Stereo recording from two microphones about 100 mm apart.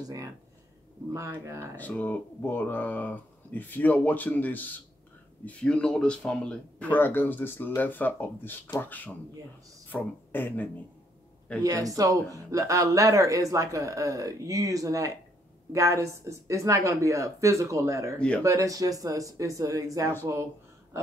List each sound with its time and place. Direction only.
0.0 s speech: 35° right (ahead or behind)
1.4 s speech: 30° right (ahead or behind)
1.8 s speech: 15° left (ahead or behind)
11.6 s speech: 35° right (ahead or behind)